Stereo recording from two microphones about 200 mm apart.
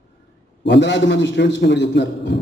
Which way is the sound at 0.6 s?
65° left (ahead or behind).